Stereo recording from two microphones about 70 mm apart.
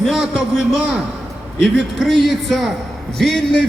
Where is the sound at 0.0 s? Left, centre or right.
Centre.